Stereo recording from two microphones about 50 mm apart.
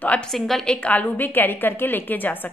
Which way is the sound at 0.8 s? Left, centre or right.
Left.